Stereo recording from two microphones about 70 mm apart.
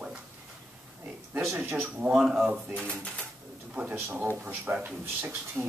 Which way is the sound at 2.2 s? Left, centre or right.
Centre.